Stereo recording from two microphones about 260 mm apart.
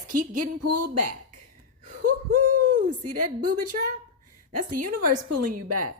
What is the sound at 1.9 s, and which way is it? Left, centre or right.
Speech, right.